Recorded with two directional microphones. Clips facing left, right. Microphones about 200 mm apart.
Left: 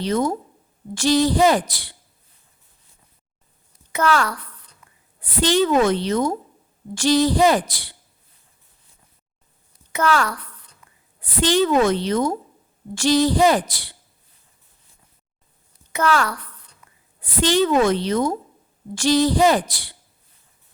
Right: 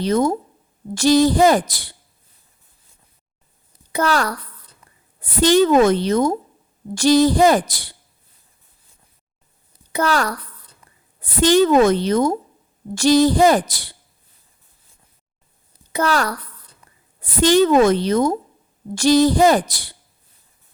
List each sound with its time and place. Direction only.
0.0 s a woman's voice: 45° right (ahead or behind)
3.9 s a woman's voice: 35° right (ahead or behind)
4.8 s a sound: 35° right (ahead or behind)
5.2 s a woman's voice: 45° right (ahead or behind)
9.9 s a woman's voice: 35° right (ahead or behind)
15.9 s a woman's voice: 35° right (ahead or behind)